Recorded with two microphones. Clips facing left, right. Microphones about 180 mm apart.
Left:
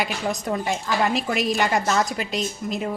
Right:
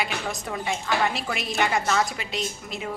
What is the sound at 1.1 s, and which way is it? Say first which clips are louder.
A woman's voice: left 7 dB; 40° left (ahead or behind).